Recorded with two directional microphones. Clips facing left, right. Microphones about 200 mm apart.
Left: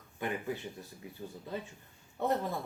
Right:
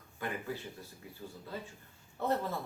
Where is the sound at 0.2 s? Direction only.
20° left (ahead or behind).